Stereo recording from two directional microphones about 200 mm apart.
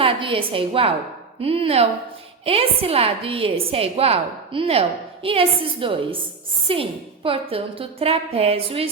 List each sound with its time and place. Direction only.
0.0 s a woman's voice: 25° right (ahead or behind)